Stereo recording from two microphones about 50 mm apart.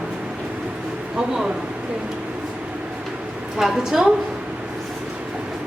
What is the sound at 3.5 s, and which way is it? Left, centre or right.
Speech, centre.